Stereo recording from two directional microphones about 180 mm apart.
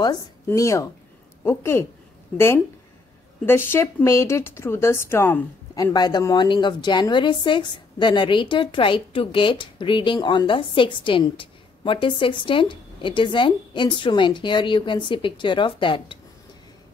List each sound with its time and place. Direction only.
0.5 s speech: 15° left (ahead or behind)
5.9 s a woman's voice: 20° left (ahead or behind)